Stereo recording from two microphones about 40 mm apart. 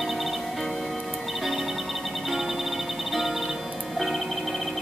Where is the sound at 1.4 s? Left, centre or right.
Centre.